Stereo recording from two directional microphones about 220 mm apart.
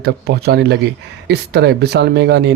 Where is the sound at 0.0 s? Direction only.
45° right (ahead or behind).